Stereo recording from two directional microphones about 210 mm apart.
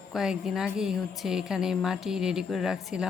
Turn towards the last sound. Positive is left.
turn(degrees=0)  # may be behind; listen again after turning